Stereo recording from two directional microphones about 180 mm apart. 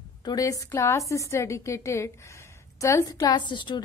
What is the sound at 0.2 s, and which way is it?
A woman's voice, 20° left (ahead or behind).